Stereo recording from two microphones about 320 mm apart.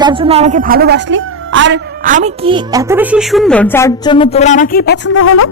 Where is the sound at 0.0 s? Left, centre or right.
Centre; by 5.5 s left.